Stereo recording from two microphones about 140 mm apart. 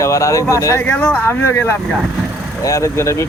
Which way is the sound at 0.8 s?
10° left (ahead or behind).